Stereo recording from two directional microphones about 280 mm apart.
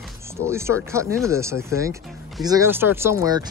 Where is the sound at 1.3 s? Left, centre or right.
Centre.